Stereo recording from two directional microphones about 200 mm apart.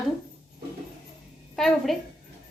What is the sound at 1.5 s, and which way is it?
Speech, centre (ahead or behind).